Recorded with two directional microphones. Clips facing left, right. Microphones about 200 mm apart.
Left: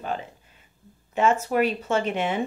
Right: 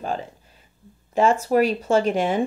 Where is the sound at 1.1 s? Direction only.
35° right (ahead or behind).